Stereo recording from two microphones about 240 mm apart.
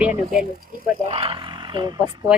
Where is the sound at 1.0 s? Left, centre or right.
Right.